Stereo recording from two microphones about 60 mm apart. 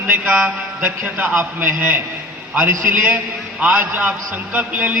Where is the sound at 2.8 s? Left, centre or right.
Right.